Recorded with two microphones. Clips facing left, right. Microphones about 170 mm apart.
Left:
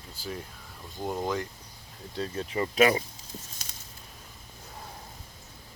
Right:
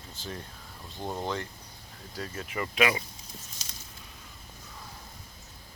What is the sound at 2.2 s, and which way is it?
Speech, 30° left (ahead or behind).